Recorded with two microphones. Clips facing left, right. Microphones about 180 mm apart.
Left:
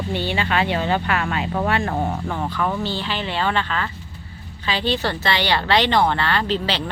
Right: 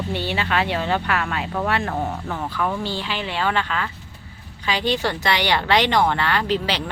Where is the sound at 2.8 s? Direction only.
10° right (ahead or behind).